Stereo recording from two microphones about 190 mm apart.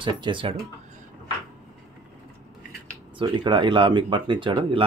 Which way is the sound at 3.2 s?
25° right (ahead or behind).